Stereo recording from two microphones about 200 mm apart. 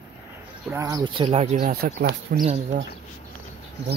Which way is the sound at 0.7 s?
15° right (ahead or behind).